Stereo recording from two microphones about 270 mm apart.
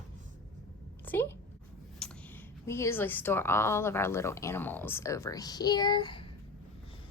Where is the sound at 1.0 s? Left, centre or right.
Centre.